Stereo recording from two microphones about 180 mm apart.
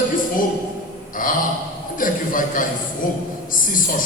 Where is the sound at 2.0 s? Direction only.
50° left (ahead or behind).